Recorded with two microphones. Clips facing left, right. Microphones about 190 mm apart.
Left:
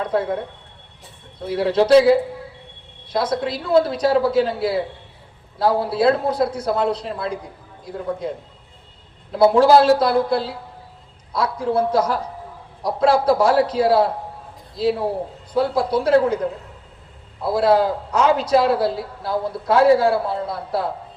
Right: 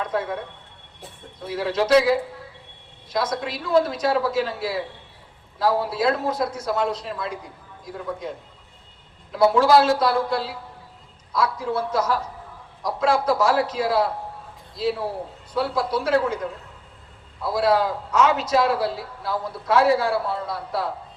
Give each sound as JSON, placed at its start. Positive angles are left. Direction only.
{"t": 0.0, "sound": "speech", "side_deg": 30}
{"t": 1.4, "sound": "a man's voice", "side_deg": 30}
{"t": 9.3, "sound": "a man's voice", "side_deg": 30}